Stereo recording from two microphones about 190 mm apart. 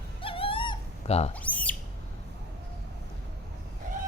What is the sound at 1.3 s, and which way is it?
Squawk, 10° left (ahead or behind).